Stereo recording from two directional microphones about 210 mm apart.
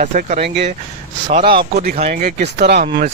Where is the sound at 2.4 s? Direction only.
50° right (ahead or behind).